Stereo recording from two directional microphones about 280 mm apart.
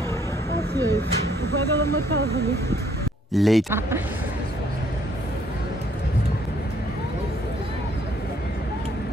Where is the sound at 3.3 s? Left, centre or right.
Centre.